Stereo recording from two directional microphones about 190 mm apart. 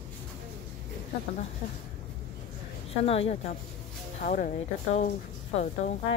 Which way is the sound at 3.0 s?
30° left (ahead or behind).